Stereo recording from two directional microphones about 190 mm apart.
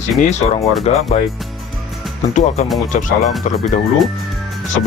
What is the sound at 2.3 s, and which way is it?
A man's voice, 35° left (ahead or behind).